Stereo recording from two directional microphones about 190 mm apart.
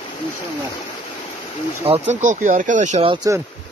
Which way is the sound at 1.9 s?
35° right (ahead or behind).